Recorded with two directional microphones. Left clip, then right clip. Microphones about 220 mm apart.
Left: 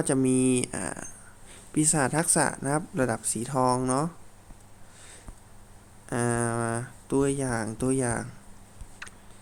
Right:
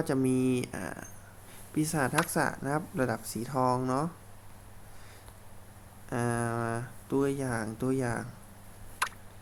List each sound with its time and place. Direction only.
0.0 s speech: 20° left (ahead or behind)
6.1 s speech: 20° left (ahead or behind)
9.0 s a sound: 5° right (ahead or behind)